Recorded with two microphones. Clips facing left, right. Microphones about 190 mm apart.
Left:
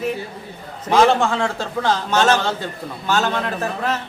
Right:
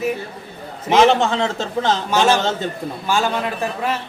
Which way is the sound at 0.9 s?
20° right (ahead or behind).